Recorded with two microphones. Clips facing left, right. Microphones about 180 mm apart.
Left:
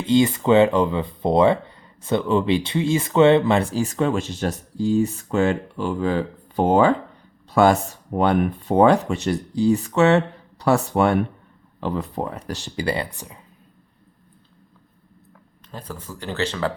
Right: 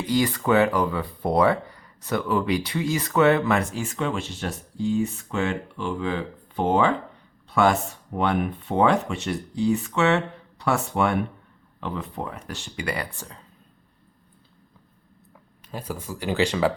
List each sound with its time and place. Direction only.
0.0 s speech: 25° left (ahead or behind)
13.1 s speech: 15° left (ahead or behind)
15.7 s speech: 10° right (ahead or behind)